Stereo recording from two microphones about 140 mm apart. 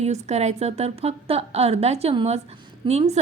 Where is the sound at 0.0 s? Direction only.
50° right (ahead or behind).